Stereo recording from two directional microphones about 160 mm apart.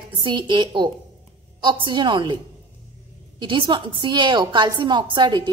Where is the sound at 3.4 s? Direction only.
30° right (ahead or behind).